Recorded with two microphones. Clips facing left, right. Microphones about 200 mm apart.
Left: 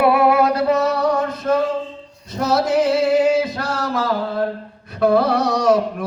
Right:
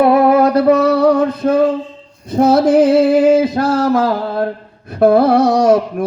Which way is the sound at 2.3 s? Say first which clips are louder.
Right 8 dB; 55° right (ahead or behind).